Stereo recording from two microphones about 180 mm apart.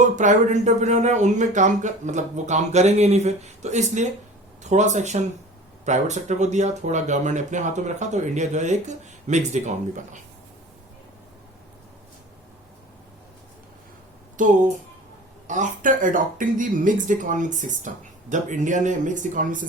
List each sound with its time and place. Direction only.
0.0 s speech: 45° right (ahead or behind)
14.4 s speech: 45° right (ahead or behind)